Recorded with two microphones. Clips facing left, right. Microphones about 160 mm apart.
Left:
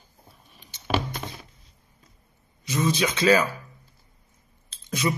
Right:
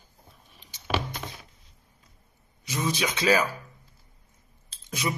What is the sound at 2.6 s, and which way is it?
Speech, 15° right (ahead or behind).